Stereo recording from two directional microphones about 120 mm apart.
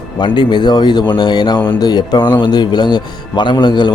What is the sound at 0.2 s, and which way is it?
Speech, 40° left (ahead or behind).